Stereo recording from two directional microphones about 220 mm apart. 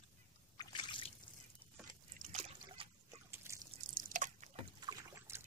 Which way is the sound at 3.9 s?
35° right (ahead or behind).